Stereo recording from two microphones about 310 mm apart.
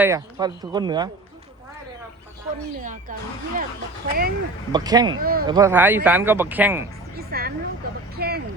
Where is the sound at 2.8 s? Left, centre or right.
Right.